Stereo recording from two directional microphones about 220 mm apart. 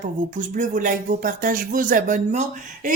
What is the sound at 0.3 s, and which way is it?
Speech, 35° right (ahead or behind).